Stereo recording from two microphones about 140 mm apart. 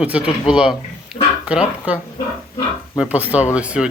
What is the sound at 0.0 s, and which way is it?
Speech, 10° right (ahead or behind).